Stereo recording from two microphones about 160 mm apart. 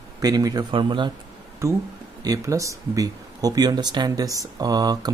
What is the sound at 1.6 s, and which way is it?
Speech, 15° right (ahead or behind).